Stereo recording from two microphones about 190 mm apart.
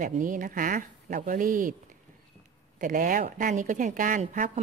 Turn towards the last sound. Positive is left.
turn(degrees=-45)  # may be behind; listen again after turning